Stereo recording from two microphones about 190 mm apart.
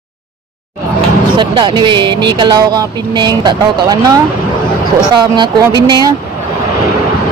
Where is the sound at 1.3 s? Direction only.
25° right (ahead or behind).